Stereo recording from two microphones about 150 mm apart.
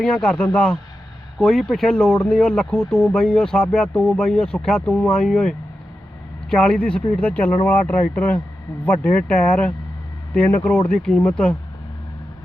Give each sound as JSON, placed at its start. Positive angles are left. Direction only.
{"t": 0.0, "sound": "speech", "side_deg": 5}